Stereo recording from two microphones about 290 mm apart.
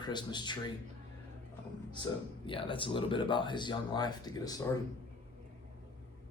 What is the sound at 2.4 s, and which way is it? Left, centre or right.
Speech, centre.